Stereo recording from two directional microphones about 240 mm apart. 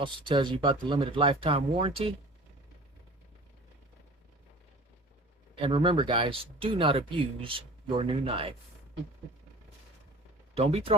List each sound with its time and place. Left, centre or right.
0.0 s speech: right
5.5 s speech: right
10.5 s speech: right